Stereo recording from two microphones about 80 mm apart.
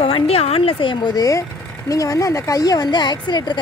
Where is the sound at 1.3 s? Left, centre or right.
Left.